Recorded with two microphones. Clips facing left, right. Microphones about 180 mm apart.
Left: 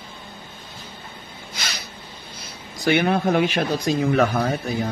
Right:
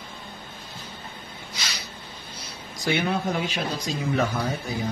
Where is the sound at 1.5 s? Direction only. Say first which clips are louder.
Left 3 dB; 55° left (ahead or behind).